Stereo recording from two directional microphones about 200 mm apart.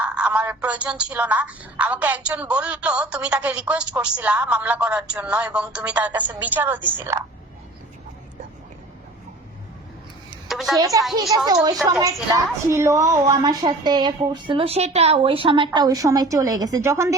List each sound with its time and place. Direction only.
0.0 s a woman's voice: 5° right (ahead or behind)
10.5 s a woman's voice: centre (ahead or behind)
10.8 s a woman's voice: 15° right (ahead or behind)